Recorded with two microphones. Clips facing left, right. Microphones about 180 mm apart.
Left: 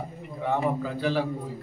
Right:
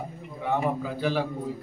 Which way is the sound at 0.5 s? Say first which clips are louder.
Even; 5° right (ahead or behind).